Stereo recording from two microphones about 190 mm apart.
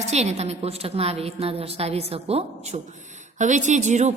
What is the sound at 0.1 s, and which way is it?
A woman's voice, 35° right (ahead or behind).